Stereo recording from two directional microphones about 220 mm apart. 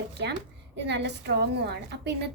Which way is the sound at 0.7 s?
50° right (ahead or behind).